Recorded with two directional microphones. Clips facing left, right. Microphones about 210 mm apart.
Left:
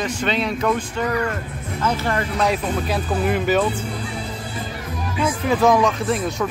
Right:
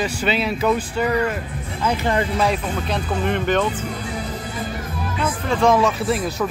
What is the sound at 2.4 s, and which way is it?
Speech, centre (ahead or behind).